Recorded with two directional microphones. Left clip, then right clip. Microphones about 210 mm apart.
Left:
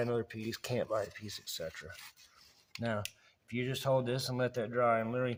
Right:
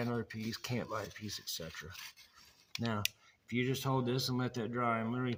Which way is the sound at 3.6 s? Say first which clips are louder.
Left 3 dB; 10° left (ahead or behind).